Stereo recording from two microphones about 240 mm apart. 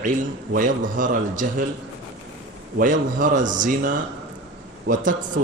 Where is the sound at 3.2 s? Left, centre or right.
Right.